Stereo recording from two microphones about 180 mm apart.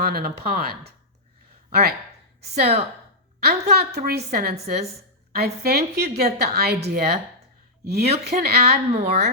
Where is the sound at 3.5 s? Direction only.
60° right (ahead or behind).